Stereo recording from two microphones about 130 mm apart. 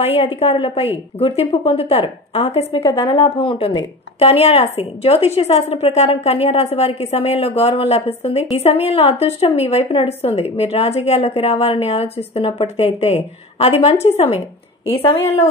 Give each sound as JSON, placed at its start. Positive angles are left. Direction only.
{"t": 0.0, "sound": "a woman's voice", "side_deg": 50}
{"t": 3.0, "sound": "speech", "side_deg": 25}
{"t": 3.3, "sound": "a woman's voice", "side_deg": 45}